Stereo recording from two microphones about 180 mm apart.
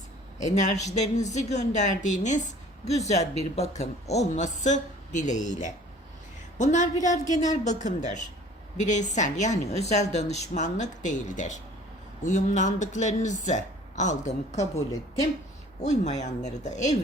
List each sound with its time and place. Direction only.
0.3 s a woman's voice: 40° left (ahead or behind)
15.8 s a woman's voice: 40° left (ahead or behind)